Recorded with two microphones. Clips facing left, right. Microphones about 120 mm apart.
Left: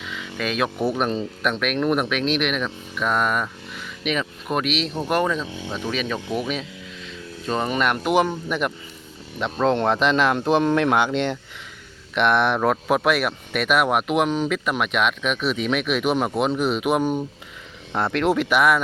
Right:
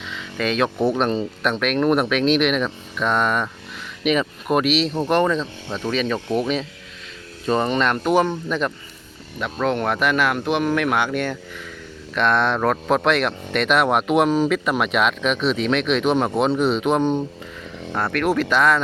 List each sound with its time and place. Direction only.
0.0 s speech: 5° left (ahead or behind)
17.9 s speech: 20° left (ahead or behind)